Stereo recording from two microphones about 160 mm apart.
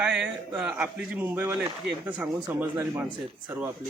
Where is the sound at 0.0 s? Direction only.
5° right (ahead or behind).